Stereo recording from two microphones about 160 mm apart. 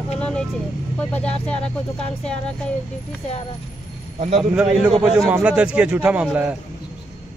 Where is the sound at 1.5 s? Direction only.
40° left (ahead or behind).